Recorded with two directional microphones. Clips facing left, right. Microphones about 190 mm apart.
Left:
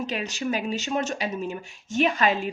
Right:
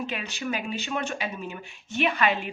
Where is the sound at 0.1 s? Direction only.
40° left (ahead or behind).